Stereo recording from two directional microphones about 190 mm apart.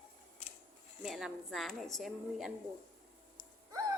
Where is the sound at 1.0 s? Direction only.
Centre (ahead or behind).